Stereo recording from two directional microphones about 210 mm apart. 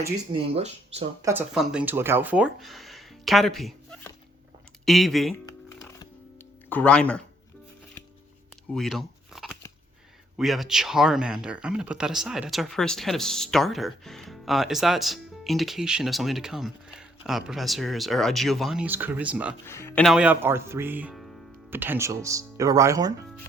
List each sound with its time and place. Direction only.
0.3 s speech: 30° right (ahead or behind)
1.2 s speech: 10° right (ahead or behind)
4.9 s speech: centre (ahead or behind)
6.7 s speech: 5° left (ahead or behind)
8.7 s shuffling cards: centre (ahead or behind)
10.3 s speech: centre (ahead or behind)
19.6 s speech: 10° left (ahead or behind)
20.1 s speech: 5° right (ahead or behind)
21.7 s speech: 10° right (ahead or behind)